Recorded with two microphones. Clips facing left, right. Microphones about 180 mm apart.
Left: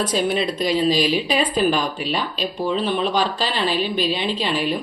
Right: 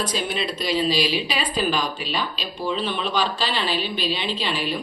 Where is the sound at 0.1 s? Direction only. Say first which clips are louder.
Left 6 dB; 45° left (ahead or behind).